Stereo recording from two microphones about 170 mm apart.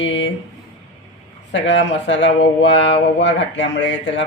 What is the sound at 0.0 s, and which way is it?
Speech, 90° left.